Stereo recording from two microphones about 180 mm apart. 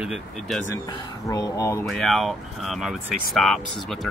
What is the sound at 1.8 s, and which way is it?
Speech, centre (ahead or behind).